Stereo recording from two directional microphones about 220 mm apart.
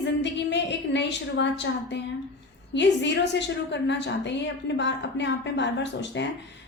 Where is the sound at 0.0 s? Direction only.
55° left (ahead or behind).